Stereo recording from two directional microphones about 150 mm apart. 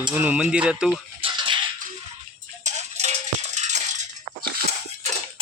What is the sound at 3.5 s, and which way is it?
Rattle, 50° right (ahead or behind).